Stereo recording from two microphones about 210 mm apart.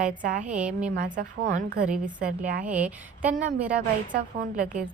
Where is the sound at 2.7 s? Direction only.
5° right (ahead or behind).